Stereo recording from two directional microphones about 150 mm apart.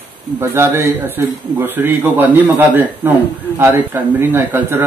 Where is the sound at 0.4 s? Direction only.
15° right (ahead or behind).